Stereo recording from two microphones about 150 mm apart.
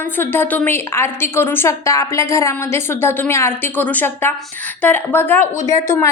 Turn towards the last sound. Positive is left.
turn(degrees=20)  # may be behind; listen again after turning